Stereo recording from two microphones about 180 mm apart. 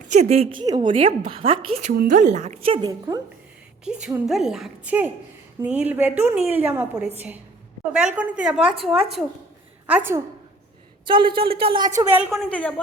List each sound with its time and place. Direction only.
0.1 s a woman's voice: 40° right (ahead or behind)
0.6 s a woman's voice: 25° right (ahead or behind)
1.9 s a woman's voice: 50° right (ahead or behind); by 3.2 s 25° right (ahead or behind)
3.8 s a woman's voice: 5° right (ahead or behind)
9.8 s a woman's voice: 10° right (ahead or behind)
11.0 s speech: 25° right (ahead or behind)
11.9 s a woman's voice: 10° right (ahead or behind)
12.5 s speech: 5° left (ahead or behind)